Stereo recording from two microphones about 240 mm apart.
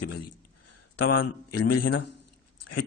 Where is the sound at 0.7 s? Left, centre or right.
Left.